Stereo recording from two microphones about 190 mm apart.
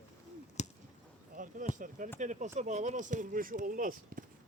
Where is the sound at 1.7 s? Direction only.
40° right (ahead or behind).